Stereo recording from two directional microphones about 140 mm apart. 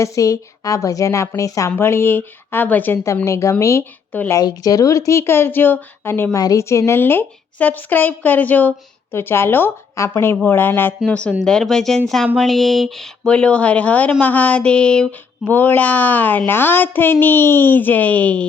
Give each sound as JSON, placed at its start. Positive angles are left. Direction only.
{"t": 0.0, "sound": "a woman's voice", "side_deg": 20}
{"t": 4.4, "sound": "a woman's voice", "side_deg": 25}